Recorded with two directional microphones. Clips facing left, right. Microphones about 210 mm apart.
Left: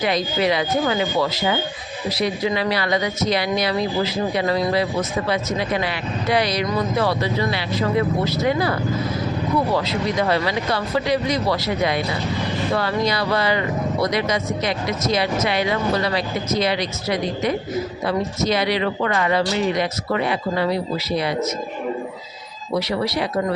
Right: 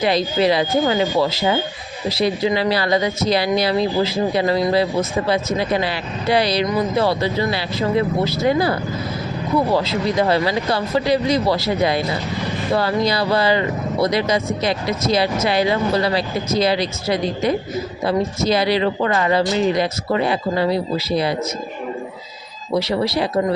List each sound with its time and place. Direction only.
0.0 s speech: 30° right (ahead or behind)
22.8 s speech: 30° right (ahead or behind)